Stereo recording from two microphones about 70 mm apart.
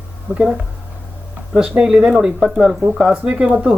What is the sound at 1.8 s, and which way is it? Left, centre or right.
Speech, centre.